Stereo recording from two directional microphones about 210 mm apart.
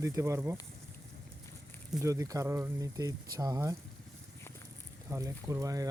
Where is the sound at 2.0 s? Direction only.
15° right (ahead or behind).